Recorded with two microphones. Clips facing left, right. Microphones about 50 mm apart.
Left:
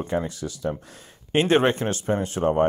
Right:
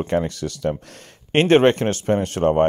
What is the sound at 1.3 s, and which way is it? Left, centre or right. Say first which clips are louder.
Speech: right 5 dB; right.